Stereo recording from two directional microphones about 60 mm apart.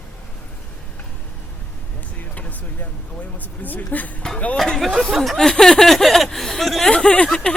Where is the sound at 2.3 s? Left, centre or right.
Left.